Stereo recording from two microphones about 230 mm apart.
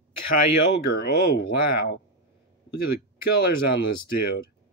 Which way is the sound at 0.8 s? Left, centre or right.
Left.